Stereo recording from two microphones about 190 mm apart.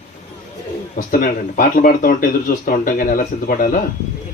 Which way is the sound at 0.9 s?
45° left (ahead or behind).